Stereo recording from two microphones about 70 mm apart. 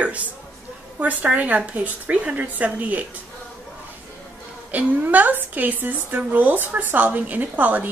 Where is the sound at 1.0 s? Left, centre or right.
Right.